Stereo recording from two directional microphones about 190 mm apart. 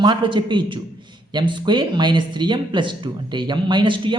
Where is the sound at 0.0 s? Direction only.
25° right (ahead or behind).